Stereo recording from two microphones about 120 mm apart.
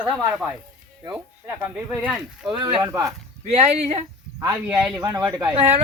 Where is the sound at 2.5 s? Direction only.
45° right (ahead or behind).